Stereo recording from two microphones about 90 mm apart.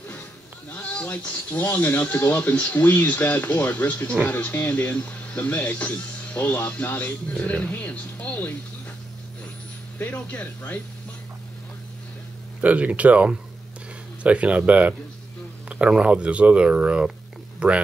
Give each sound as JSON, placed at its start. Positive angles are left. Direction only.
{"t": 1.1, "sound": "speech", "side_deg": 15}
{"t": 9.9, "sound": "speech", "side_deg": 15}
{"t": 12.6, "sound": "speech", "side_deg": -15}